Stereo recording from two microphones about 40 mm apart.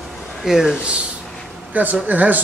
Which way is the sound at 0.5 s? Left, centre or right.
Centre.